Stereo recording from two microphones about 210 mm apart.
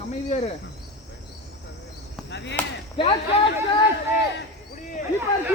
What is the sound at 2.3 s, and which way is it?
Basketball bounce, 55° left (ahead or behind).